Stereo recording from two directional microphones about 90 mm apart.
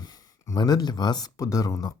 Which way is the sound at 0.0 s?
50° left (ahead or behind).